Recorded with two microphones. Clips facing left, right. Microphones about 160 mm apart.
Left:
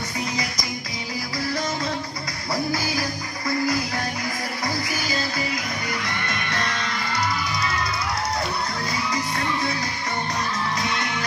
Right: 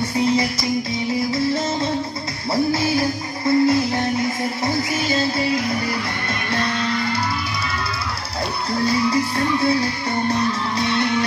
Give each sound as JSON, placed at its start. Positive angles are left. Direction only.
{"t": 2.5, "sound": "music", "side_deg": -25}